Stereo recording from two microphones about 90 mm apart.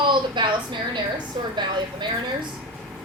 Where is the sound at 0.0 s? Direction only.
60° right (ahead or behind).